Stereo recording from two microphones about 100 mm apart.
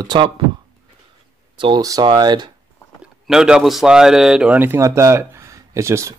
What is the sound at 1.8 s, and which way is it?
Speech, 35° right (ahead or behind).